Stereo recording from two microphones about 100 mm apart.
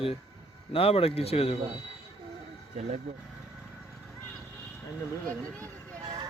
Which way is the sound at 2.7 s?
90° right.